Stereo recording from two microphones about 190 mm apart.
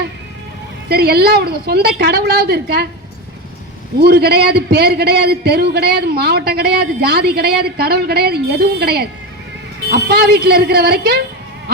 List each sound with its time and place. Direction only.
0.9 s a man's voice: 55° right (ahead or behind)
4.0 s a man's voice: 55° right (ahead or behind)